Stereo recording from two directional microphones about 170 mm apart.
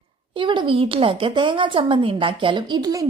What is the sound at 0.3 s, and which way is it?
Speech, 30° right (ahead or behind).